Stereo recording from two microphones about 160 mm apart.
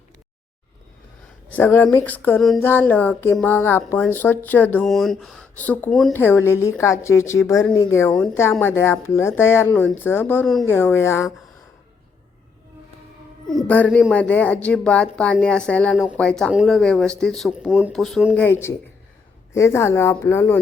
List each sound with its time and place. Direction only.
1.5 s speech: 10° left (ahead or behind)
6.1 s speech: 15° left (ahead or behind)
10.4 s speech: centre (ahead or behind)
10.7 s speech: 15° left (ahead or behind)
13.5 s speech: 5° left (ahead or behind)
18.3 s speech: 15° left (ahead or behind)